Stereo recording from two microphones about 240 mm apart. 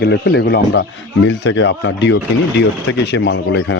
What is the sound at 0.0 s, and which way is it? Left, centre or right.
Speech, left.